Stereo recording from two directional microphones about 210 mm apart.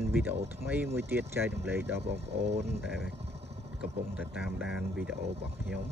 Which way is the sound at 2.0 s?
55° right (ahead or behind).